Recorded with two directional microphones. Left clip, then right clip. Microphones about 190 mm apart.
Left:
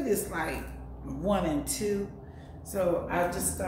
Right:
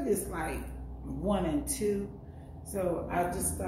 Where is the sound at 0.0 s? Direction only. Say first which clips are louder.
Left 2 dB; 10° left (ahead or behind).